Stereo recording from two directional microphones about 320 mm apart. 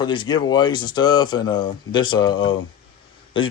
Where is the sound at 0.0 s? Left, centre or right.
Centre.